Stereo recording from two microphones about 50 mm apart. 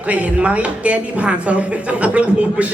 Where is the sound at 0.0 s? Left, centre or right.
Right.